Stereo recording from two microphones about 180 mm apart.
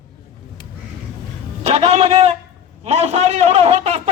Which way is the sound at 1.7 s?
35° right (ahead or behind).